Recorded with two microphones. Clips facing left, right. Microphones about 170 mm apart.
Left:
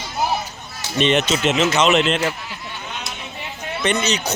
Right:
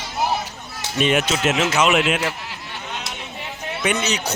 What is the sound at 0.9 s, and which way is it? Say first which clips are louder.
Speech: left 2 dB; 5° right (ahead or behind).